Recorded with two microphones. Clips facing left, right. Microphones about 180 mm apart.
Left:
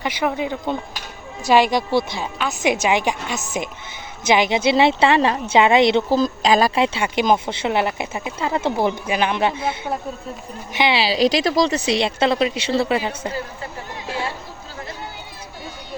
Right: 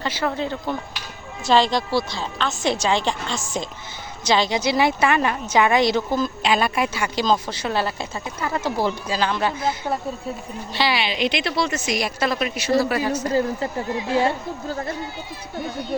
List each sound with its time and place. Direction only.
0.0 s a woman's voice: 15° left (ahead or behind)
10.8 s a woman's voice: 20° left (ahead or behind)
11.0 s a woman's voice: 35° left (ahead or behind)